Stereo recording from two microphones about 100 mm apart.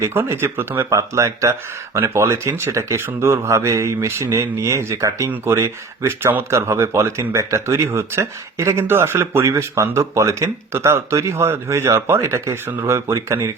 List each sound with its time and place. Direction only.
0.0 s speech: 25° right (ahead or behind)